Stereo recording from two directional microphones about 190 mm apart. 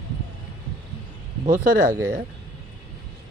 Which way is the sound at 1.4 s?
45° right (ahead or behind).